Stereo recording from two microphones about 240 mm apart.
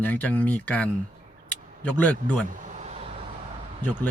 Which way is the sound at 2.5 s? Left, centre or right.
Right.